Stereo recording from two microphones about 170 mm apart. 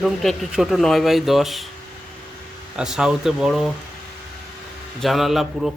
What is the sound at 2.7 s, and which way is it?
Speech, 5° right (ahead or behind).